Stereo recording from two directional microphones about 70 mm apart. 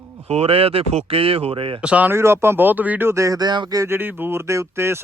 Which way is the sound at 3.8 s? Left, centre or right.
Right.